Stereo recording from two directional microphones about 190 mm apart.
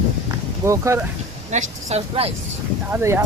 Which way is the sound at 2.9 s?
10° right (ahead or behind).